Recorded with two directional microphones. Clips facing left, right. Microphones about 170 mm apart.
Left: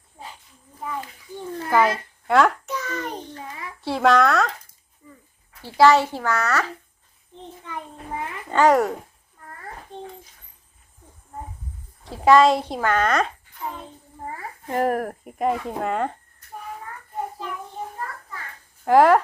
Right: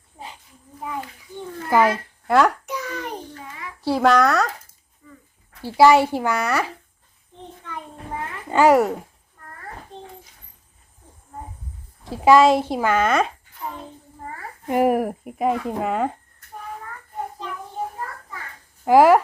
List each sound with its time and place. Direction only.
1.7 s a woman's voice: 5° right (ahead or behind)
2.6 s a sound: 15° right (ahead or behind)
3.8 s speech: centre (ahead or behind)
5.0 s a sound: 25° left (ahead or behind)
5.6 s speech: 10° right (ahead or behind)
8.4 s speech: 10° right (ahead or behind)
12.0 s speech: 5° right (ahead or behind)
14.7 s speech: 10° right (ahead or behind)
18.9 s speech: 5° right (ahead or behind)